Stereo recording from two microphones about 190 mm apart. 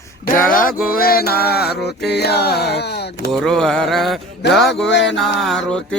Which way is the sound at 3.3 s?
5° left (ahead or behind).